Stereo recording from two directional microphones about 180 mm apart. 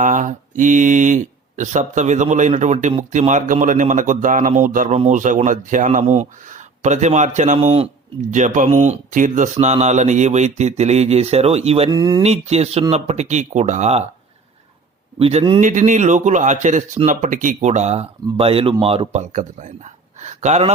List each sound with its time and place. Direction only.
0.0 s speech: 45° right (ahead or behind)
11.9 s speech: 20° right (ahead or behind)
12.2 s speech: 35° right (ahead or behind)
15.2 s speech: 35° right (ahead or behind)
15.6 s speech: 45° right (ahead or behind)